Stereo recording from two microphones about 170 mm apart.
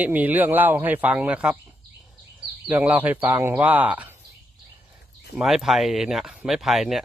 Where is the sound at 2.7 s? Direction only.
10° right (ahead or behind).